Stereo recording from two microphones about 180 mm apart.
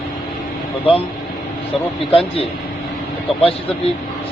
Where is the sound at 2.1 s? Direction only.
30° left (ahead or behind).